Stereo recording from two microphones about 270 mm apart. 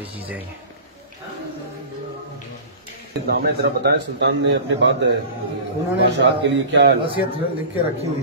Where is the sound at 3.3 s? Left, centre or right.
Right.